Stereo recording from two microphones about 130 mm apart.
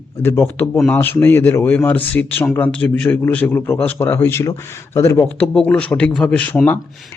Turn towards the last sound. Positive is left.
turn(degrees=10)  # may be behind; listen again after turning